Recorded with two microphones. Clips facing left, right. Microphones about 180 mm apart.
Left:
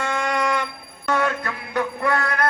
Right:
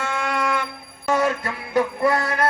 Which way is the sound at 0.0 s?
5° right (ahead or behind).